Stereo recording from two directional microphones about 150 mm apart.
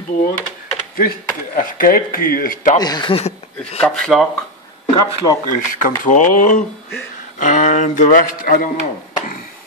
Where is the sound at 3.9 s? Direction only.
Centre (ahead or behind).